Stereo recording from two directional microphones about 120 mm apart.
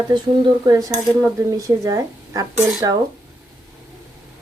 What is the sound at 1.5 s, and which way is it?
Speech, 30° right (ahead or behind).